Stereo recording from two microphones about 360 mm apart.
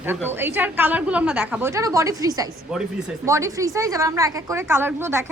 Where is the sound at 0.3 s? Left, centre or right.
Centre.